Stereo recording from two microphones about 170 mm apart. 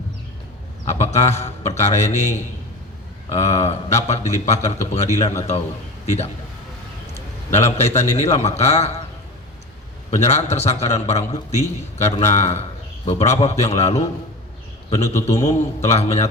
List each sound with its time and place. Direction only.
0.9 s speech: 40° left (ahead or behind)
7.1 s a man's voice: 40° left (ahead or behind)
10.1 s speech: 40° left (ahead or behind)